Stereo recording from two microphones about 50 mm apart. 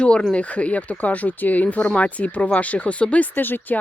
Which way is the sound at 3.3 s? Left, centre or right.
Left.